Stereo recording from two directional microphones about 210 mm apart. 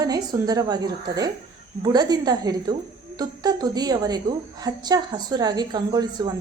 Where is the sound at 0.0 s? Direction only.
20° right (ahead or behind).